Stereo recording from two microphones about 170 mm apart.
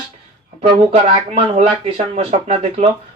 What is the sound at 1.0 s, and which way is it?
Speech, 35° right (ahead or behind).